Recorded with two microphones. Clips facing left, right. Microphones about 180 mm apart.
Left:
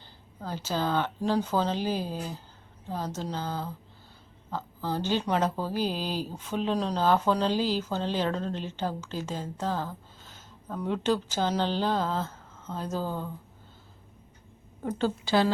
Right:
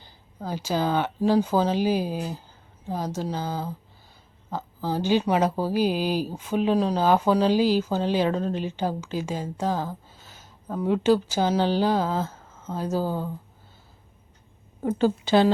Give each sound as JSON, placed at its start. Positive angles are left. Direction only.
{"t": 0.0, "sound": "speech", "side_deg": -10}
{"t": 14.8, "sound": "speech", "side_deg": -10}